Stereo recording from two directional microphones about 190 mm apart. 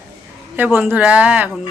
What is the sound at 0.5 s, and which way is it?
Speech, 10° right (ahead or behind).